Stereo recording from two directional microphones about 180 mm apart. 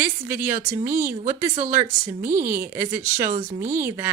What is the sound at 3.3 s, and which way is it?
Speech, 40° right (ahead or behind).